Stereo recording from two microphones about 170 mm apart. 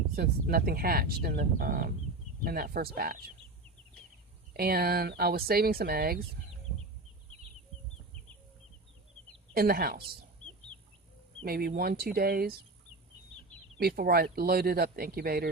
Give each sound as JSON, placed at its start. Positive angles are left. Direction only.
{"t": 0.2, "sound": "speech", "side_deg": -60}
{"t": 4.5, "sound": "speech", "side_deg": -65}
{"t": 9.6, "sound": "speech", "side_deg": -60}
{"t": 11.4, "sound": "speech", "side_deg": -65}
{"t": 13.7, "sound": "speech", "side_deg": -65}